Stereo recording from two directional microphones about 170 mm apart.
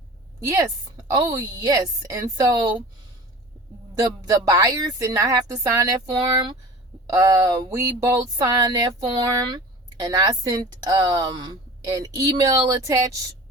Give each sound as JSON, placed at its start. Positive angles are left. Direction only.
{"t": 1.1, "sound": "speech", "side_deg": -25}
{"t": 3.9, "sound": "speech", "side_deg": -20}